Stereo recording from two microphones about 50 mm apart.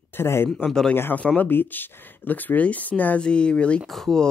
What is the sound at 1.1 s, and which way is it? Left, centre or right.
Speech, left.